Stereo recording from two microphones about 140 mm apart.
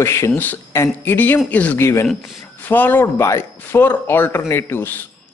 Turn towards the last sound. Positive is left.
turn(degrees=15)  # may be behind; listen again after turning